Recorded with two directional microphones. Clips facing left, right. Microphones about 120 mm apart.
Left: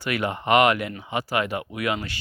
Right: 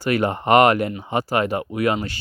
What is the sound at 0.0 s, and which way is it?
Speech, 40° right (ahead or behind).